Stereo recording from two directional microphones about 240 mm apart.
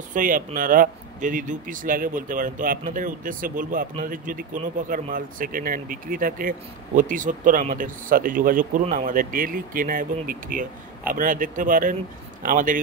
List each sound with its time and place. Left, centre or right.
0.1 s speech: right